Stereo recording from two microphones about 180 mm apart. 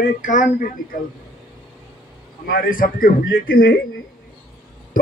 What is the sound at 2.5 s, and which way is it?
A man's voice, 50° left (ahead or behind).